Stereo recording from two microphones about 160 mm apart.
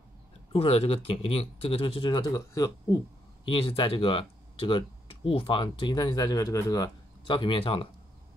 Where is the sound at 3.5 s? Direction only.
35° left (ahead or behind).